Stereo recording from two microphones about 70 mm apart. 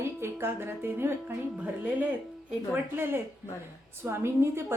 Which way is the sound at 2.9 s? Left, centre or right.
Right.